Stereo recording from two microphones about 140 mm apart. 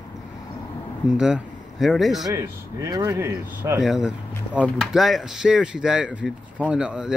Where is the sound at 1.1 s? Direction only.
5° right (ahead or behind).